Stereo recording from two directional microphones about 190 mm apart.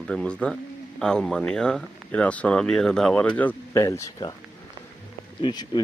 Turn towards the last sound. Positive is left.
turn(degrees=20)  # may be behind; listen again after turning